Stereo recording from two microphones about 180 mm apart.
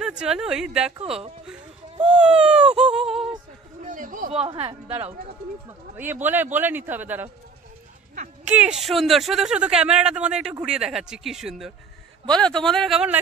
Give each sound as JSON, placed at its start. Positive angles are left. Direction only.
{"t": 0.0, "sound": "speech", "side_deg": -5}
{"t": 1.0, "sound": "a woman's voice", "side_deg": -35}
{"t": 2.0, "sound": "speech", "side_deg": -5}
{"t": 2.8, "sound": "a sound", "side_deg": -5}
{"t": 3.8, "sound": "a sound", "side_deg": -45}
{"t": 4.3, "sound": "a woman's voice", "side_deg": -30}
{"t": 6.2, "sound": "speech", "side_deg": -10}
{"t": 8.5, "sound": "speech", "side_deg": -5}